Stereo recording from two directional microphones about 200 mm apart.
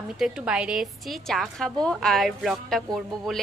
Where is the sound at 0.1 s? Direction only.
5° right (ahead or behind).